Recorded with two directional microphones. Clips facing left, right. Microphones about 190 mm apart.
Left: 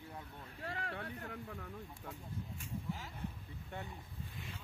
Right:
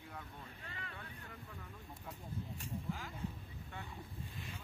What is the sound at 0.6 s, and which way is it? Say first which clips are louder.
Speech: left 12 dB; 70° left (ahead or behind).